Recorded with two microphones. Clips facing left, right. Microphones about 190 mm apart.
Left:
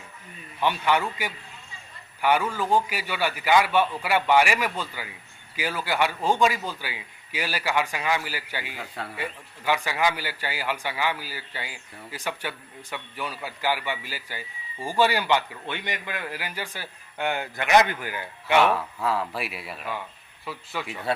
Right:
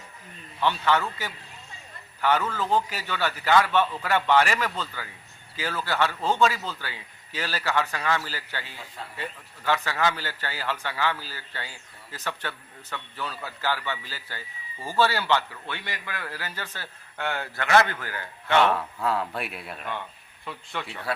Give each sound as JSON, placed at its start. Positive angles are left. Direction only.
{"t": 0.6, "sound": "a man's voice", "side_deg": 15}
{"t": 20.8, "sound": "a man's voice", "side_deg": 15}